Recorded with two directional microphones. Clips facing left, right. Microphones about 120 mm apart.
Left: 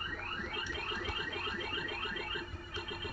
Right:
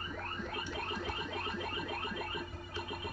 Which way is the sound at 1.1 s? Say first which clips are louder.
Right 2 dB; 30° right (ahead or behind).